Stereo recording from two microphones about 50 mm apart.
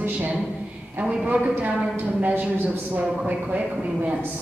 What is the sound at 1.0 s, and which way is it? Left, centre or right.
Speech, right.